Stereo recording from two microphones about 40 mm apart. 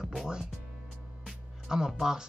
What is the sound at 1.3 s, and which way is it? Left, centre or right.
Music, centre.